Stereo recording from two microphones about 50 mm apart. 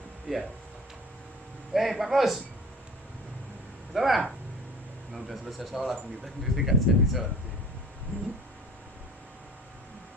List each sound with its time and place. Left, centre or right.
0.3 s speech: centre
1.7 s speech: centre
3.9 s speech: centre